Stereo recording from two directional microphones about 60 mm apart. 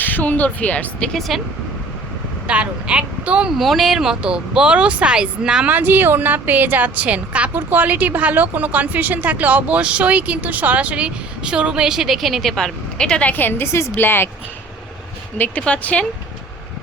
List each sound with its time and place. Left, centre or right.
0.0 s speech: left
2.5 s speech: right
3.6 s speech: centre
5.6 s a woman's voice: right; by 13.3 s centre
13.3 s a woman's voice: left
13.9 s a woman's voice: left
15.4 s speech: left